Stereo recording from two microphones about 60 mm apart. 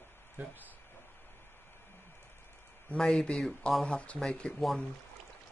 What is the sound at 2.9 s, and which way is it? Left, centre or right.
Speech, centre.